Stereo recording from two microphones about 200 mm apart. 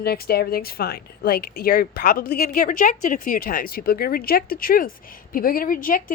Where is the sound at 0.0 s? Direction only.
50° left (ahead or behind).